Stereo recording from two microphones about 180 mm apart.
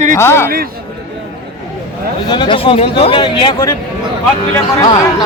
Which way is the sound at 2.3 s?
25° left (ahead or behind).